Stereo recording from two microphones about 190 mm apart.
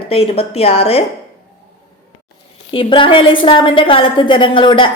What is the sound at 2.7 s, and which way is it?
A woman's voice, 25° left (ahead or behind).